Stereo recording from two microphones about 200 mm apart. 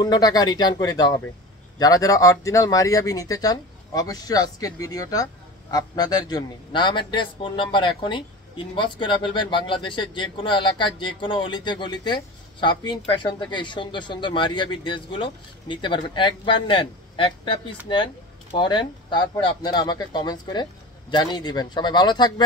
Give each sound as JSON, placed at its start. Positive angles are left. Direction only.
{"t": 0.0, "sound": "speech", "side_deg": 20}